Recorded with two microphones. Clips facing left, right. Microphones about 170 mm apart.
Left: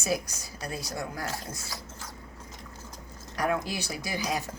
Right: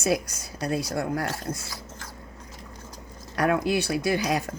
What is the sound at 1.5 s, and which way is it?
Speech, 40° right (ahead or behind).